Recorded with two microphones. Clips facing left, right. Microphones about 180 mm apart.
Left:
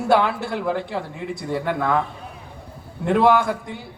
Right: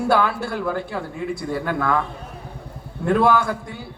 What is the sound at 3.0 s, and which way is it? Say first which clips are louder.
Speech: left 1 dB; 20° left (ahead or behind).